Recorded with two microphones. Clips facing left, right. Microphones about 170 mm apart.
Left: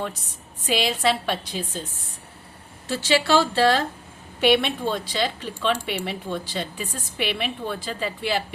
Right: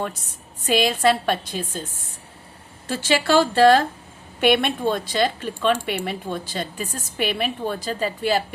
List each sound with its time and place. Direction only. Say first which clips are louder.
0.7 s speech: right 4 dB; 50° right (ahead or behind)
2.8 s speech: right 1 dB; 50° right (ahead or behind)